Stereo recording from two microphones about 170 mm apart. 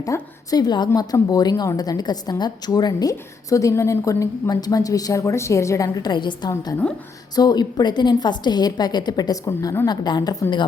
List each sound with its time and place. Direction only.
0.0 s a woman's voice: 20° left (ahead or behind)
6.5 s a woman's voice: 15° left (ahead or behind)